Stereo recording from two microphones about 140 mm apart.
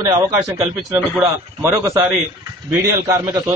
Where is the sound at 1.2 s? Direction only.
15° right (ahead or behind).